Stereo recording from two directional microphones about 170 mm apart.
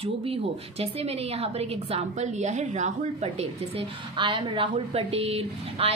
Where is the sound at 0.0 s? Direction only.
35° right (ahead or behind).